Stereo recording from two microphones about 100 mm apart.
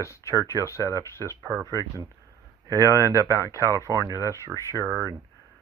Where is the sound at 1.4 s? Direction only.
30° right (ahead or behind).